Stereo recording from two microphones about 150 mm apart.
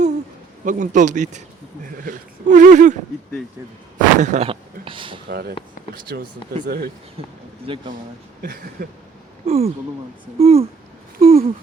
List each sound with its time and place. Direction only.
0.6 s speech: 60° right (ahead or behind)
3.9 s a sound: 55° right (ahead or behind)
4.4 s speech: 35° right (ahead or behind)
5.3 s speech: 90° right
7.2 s speech: 40° right (ahead or behind)
8.4 s a sound: 75° right (ahead or behind)
9.5 s speech: 45° right (ahead or behind)